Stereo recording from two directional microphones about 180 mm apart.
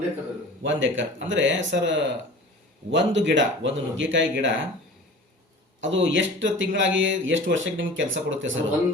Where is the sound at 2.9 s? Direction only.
85° right.